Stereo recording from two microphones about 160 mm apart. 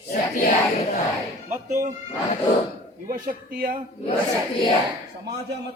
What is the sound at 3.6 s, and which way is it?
Speech, 55° right (ahead or behind).